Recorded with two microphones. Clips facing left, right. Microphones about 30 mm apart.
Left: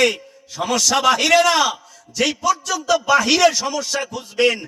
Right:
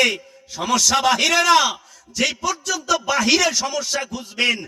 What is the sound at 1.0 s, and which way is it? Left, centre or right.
A man's voice, centre.